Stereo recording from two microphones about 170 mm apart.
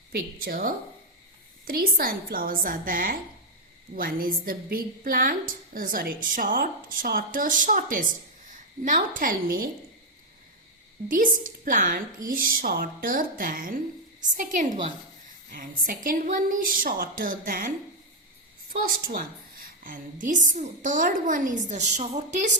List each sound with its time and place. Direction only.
0.1 s a woman's voice: 60° right (ahead or behind)
11.1 s a woman's voice: 55° right (ahead or behind)
18.7 s a woman's voice: 55° right (ahead or behind)